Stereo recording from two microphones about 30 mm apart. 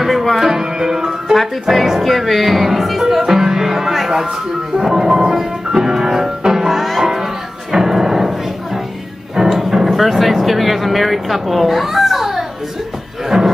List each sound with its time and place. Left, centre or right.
0.1 s music: centre
0.4 s music: centre
1.3 s speech: centre
3.2 s music: centre
6.7 s music: centre
7.7 s music: centre
9.8 s a sound: centre
13.3 s cattle: centre